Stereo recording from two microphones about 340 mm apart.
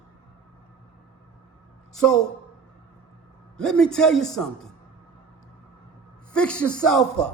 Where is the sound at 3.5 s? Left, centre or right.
Centre.